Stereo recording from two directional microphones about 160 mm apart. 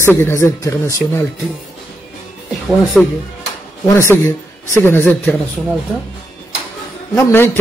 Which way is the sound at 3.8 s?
15° left (ahead or behind).